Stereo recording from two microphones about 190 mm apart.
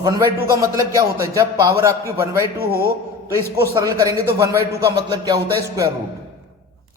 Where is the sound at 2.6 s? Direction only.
55° right (ahead or behind).